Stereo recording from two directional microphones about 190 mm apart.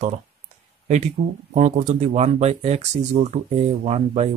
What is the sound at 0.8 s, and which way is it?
Speech, 35° right (ahead or behind).